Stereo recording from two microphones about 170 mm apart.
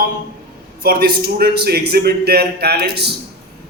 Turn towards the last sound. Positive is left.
turn(degrees=-70)  # may be behind; listen again after turning